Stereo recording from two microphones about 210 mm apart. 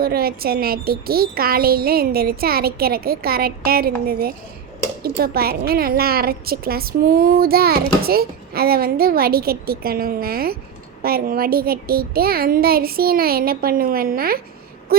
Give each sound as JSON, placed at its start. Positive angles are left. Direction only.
{"t": 0.0, "sound": "a woman's voice", "side_deg": -45}